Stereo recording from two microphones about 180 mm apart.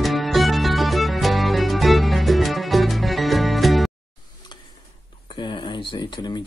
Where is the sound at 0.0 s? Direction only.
Centre (ahead or behind).